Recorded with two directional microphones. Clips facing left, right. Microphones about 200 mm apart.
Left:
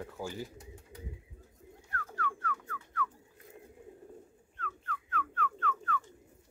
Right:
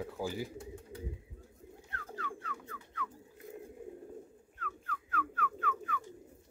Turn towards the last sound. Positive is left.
turn(degrees=-10)  # may be behind; listen again after turning